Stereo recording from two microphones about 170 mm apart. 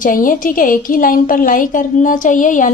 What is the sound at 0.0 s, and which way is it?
A woman's voice, 55° left (ahead or behind).